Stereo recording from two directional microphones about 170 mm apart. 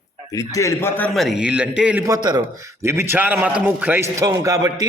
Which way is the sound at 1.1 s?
Centre (ahead or behind).